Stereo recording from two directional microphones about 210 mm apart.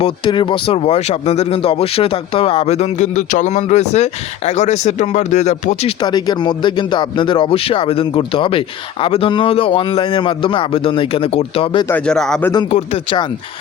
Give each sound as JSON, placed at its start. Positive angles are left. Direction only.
{"t": 0.0, "sound": "speech", "side_deg": 25}
{"t": 11.9, "sound": "speech", "side_deg": 5}
{"t": 12.7, "sound": "speech", "side_deg": 25}